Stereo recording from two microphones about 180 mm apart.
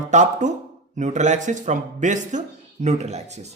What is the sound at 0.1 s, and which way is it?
A man's voice, 40° right (ahead or behind).